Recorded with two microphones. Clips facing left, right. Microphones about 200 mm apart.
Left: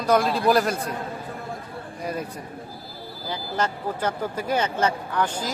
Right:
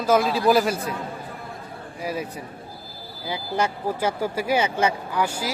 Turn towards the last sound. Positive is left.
turn(degrees=-10)  # may be behind; listen again after turning